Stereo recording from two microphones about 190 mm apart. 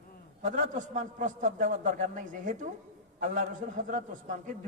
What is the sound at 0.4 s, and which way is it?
A man's voice, 40° right (ahead or behind).